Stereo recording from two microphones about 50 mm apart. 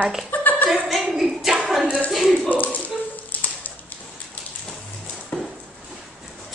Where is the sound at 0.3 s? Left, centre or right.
Left.